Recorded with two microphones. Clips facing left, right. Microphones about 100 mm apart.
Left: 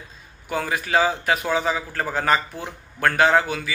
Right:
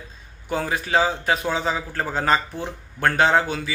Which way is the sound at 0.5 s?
30° right (ahead or behind).